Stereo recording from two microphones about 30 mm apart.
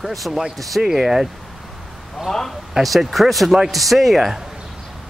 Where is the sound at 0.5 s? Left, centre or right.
Centre.